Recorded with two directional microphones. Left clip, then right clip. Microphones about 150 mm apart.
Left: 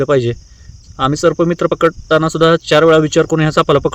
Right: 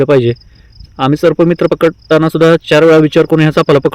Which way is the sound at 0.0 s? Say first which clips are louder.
Right 4 dB; 25° right (ahead or behind).